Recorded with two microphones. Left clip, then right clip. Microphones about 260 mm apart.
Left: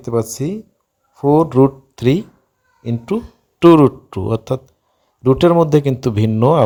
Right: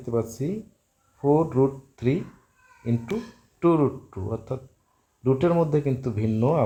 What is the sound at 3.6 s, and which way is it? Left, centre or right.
A man's voice, left.